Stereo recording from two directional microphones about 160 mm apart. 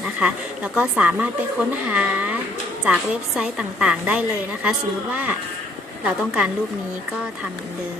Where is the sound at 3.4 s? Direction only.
5° right (ahead or behind).